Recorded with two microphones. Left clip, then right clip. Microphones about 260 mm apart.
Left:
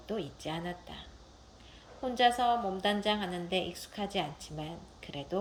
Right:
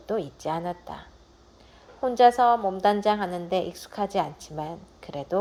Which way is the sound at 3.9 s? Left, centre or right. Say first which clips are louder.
Right 9 dB; right.